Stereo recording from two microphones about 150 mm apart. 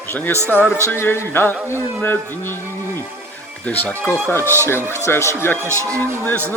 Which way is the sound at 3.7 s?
10° left (ahead or behind).